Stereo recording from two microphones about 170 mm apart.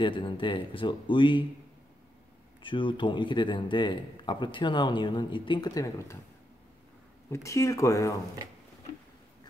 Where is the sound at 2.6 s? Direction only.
30° left (ahead or behind).